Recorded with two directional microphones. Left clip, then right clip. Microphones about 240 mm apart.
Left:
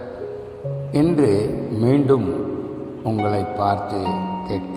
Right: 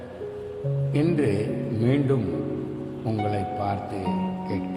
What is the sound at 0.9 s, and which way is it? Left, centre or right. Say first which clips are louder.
A man's voice: left 7 dB; centre.